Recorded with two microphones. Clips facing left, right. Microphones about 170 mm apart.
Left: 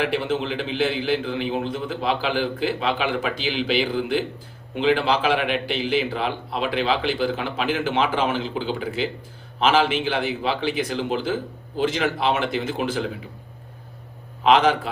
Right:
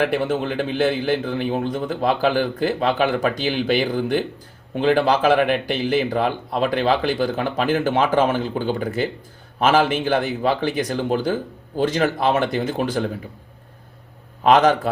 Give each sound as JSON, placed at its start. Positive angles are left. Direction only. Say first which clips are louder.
{"t": 0.0, "sound": "speech", "louder": "right 3 dB", "side_deg": -50}
{"t": 14.4, "sound": "speech", "louder": "right 2 dB", "side_deg": -45}